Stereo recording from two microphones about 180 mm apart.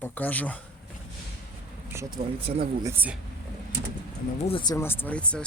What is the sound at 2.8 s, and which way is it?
Speech, 10° right (ahead or behind).